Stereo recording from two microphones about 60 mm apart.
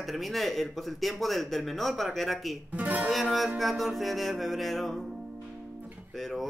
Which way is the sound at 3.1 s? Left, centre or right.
Centre.